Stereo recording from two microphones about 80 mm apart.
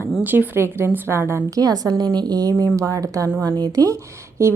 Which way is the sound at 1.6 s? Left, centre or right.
Right.